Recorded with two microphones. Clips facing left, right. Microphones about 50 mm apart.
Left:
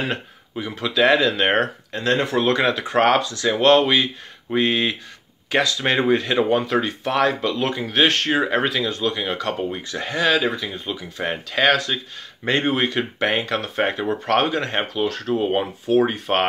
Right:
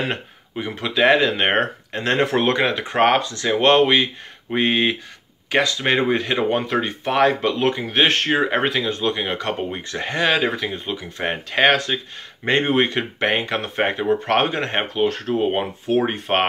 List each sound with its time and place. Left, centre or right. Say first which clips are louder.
0.1 s speech: even; right
2.5 s speech: left 1 dB; centre
10.5 s speech: right 2 dB; right